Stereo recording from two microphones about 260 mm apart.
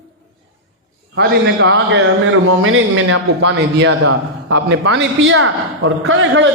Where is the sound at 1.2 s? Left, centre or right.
Right.